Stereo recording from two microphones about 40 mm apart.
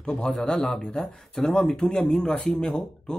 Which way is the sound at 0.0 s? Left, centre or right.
Left.